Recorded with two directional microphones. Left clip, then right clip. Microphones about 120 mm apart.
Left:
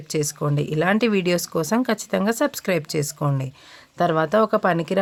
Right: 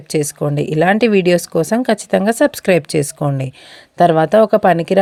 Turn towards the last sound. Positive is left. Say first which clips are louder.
# right 8 dB
turn(degrees=-40)  # may be behind; listen again after turning